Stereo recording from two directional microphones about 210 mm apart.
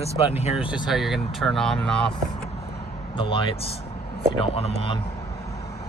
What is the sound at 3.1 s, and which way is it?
Speech, 25° left (ahead or behind).